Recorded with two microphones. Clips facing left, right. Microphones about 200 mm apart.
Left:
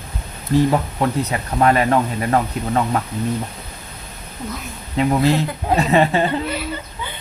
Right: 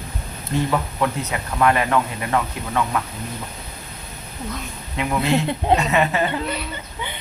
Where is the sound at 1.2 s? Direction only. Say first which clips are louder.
Left 3 dB; 35° left (ahead or behind).